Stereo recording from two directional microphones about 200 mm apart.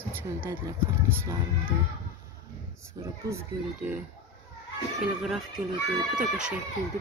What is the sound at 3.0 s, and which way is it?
Speech, 10° right (ahead or behind).